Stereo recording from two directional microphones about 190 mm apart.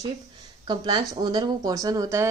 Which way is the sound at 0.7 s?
20° right (ahead or behind).